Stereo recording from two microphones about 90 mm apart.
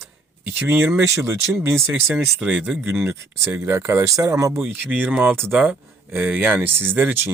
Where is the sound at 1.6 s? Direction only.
30° right (ahead or behind).